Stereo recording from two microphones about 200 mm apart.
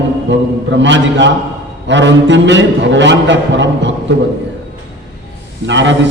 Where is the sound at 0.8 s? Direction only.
65° right (ahead or behind).